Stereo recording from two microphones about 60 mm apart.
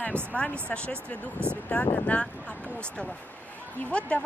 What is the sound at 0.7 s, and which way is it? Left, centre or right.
Speech, centre.